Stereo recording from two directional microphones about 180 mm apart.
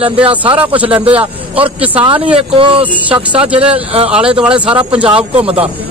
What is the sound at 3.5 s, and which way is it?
Speech, 30° right (ahead or behind).